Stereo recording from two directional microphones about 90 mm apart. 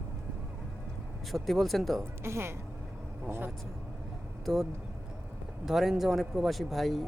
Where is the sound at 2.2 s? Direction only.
30° right (ahead or behind).